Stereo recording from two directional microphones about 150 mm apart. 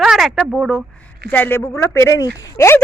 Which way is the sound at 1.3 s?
15° left (ahead or behind).